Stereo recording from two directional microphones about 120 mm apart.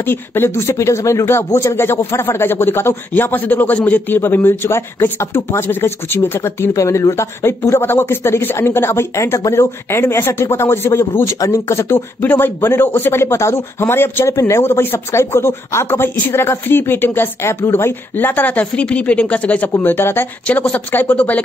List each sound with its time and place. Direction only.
0.0 s speech: 20° left (ahead or behind)